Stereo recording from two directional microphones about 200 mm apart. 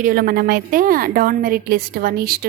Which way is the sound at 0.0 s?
50° right (ahead or behind).